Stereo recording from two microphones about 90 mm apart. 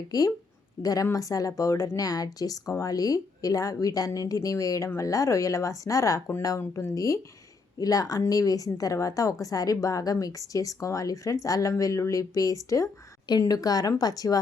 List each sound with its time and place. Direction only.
0.1 s a woman's voice: 45° left (ahead or behind)